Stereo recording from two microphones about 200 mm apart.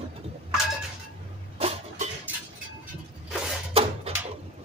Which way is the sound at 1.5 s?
30° right (ahead or behind).